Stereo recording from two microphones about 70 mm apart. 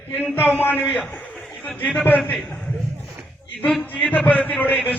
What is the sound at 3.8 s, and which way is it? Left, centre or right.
A man's voice, centre.